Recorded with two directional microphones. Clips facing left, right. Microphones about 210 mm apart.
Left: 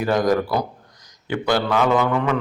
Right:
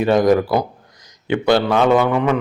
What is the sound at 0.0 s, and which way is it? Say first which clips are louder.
Mantra: right 5 dB; 25° right (ahead or behind).